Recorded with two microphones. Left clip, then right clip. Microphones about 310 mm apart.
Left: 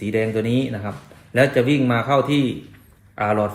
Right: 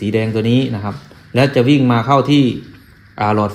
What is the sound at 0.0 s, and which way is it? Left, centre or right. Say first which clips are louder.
Speech: right 4 dB; centre.